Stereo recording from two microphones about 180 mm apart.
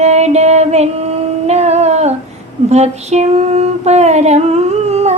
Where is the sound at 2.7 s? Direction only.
40° right (ahead or behind).